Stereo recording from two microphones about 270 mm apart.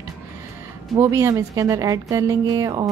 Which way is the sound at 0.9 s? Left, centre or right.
Centre.